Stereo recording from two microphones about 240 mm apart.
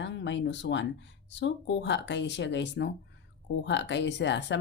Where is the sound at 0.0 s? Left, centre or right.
Left.